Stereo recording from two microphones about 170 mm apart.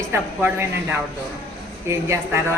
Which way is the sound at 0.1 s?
15° right (ahead or behind).